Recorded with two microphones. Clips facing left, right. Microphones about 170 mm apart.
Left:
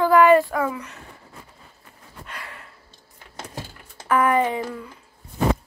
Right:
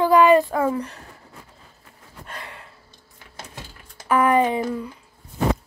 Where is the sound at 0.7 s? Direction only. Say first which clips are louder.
Right 7 dB; 35° right (ahead or behind).